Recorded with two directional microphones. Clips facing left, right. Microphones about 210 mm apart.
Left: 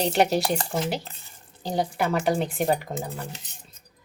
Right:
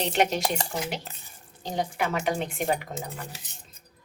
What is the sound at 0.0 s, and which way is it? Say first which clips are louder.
Speech: left 3 dB; 35° left (ahead or behind).